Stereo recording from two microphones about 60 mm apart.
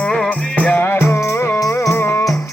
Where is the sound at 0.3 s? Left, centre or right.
Left.